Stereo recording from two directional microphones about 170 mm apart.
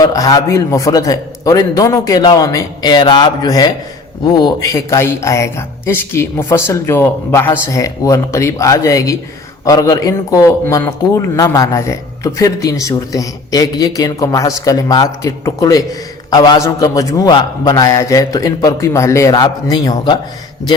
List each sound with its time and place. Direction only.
0.0 s a man's voice: 20° left (ahead or behind)